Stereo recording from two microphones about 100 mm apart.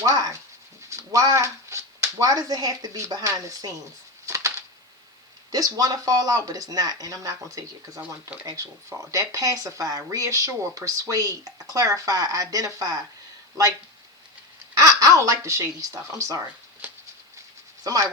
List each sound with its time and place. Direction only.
0.0 s speech: 35° right (ahead or behind)
4.3 s a sound: 30° right (ahead or behind)
5.5 s speech: 35° right (ahead or behind)
14.8 s speech: 35° right (ahead or behind)
16.8 s a sound: 20° right (ahead or behind)
17.8 s speech: 40° right (ahead or behind)